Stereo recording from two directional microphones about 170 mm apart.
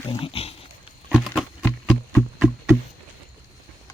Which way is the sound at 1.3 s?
5° left (ahead or behind).